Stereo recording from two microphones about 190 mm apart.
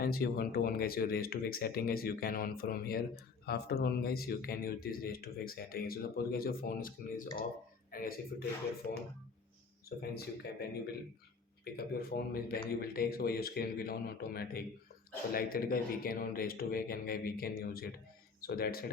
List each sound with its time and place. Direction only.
0.0 s speech: 50° left (ahead or behind)